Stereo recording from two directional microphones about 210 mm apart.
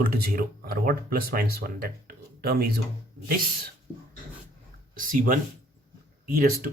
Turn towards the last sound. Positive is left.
turn(degrees=-45)  # may be behind; listen again after turning